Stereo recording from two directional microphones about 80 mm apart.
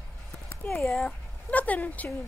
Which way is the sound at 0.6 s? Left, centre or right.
Centre.